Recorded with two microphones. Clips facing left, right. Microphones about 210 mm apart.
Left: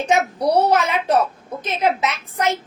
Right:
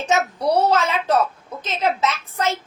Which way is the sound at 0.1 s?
15° left (ahead or behind).